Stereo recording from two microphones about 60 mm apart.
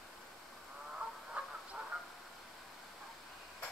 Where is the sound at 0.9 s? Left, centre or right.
Centre.